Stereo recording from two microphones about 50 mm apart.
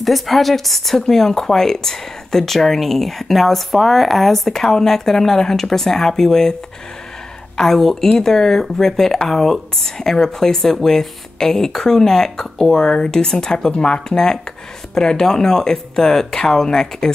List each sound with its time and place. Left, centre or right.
0.0 s speech: centre
7.5 s speech: centre